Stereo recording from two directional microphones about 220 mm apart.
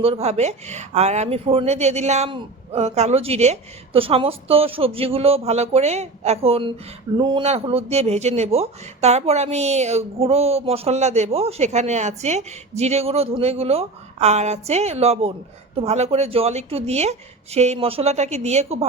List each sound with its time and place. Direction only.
0.0 s speech: 30° right (ahead or behind)